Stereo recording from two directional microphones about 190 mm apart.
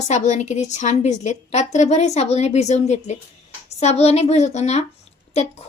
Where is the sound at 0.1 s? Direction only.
40° left (ahead or behind).